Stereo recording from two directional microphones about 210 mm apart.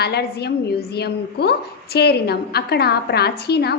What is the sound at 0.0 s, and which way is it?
A woman's voice, 50° left (ahead or behind).